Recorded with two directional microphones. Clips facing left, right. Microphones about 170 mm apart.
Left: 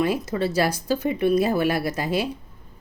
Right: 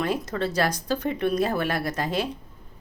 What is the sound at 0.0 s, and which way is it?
Speech, 5° left (ahead or behind).